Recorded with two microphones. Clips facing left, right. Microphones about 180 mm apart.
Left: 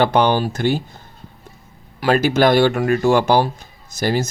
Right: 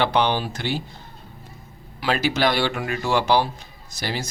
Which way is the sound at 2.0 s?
45° left (ahead or behind).